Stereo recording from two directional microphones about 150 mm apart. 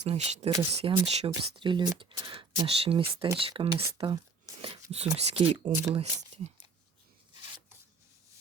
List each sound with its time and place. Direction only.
0.0 s speech: 45° right (ahead or behind); by 4.8 s 30° right (ahead or behind)
5.1 s speech: 45° right (ahead or behind)